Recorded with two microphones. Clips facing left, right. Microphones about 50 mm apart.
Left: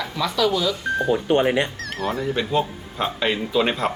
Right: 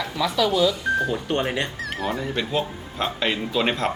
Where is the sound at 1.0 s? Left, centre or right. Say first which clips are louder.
Left 5 dB; centre.